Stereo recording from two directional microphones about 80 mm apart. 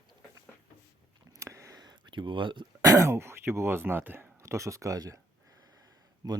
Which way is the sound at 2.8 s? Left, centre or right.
Right.